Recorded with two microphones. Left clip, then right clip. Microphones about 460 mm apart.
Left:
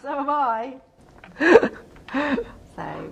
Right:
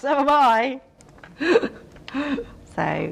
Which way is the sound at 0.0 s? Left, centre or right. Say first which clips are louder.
Right 6 dB; right.